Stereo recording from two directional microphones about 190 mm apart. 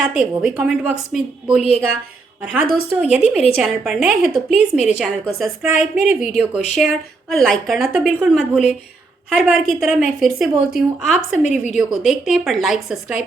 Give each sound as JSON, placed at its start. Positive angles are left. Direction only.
{"t": 0.1, "sound": "a woman's voice", "side_deg": -5}